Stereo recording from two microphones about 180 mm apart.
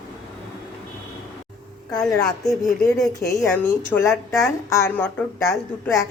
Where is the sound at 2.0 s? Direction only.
Centre (ahead or behind).